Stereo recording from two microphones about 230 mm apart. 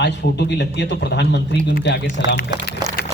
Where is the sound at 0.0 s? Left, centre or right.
Left.